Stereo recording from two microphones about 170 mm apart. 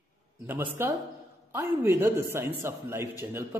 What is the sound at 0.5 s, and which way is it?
A man's voice, 15° right (ahead or behind).